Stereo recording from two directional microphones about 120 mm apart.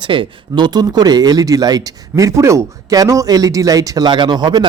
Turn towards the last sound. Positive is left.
turn(degrees=-40)  # may be behind; listen again after turning